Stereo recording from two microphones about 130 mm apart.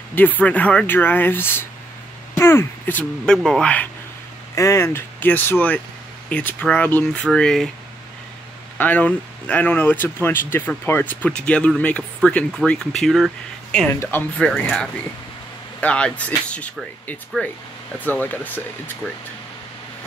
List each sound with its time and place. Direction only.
0.1 s speech: 15° left (ahead or behind)
4.6 s speech: 20° left (ahead or behind); by 7.7 s 5° left (ahead or behind)
8.7 s speech: 15° left (ahead or behind)